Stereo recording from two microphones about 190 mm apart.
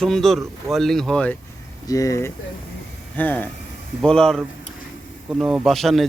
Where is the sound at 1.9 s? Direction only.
15° left (ahead or behind).